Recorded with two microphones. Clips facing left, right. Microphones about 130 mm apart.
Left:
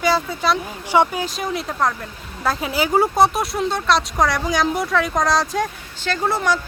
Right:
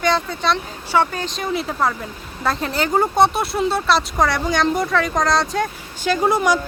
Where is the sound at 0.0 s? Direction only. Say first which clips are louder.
Even; 5° left (ahead or behind).